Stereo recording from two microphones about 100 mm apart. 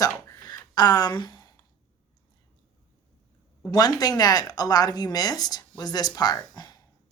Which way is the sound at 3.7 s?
40° left (ahead or behind).